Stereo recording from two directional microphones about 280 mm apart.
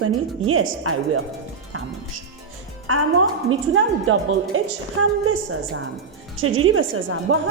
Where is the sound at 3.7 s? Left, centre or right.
Right.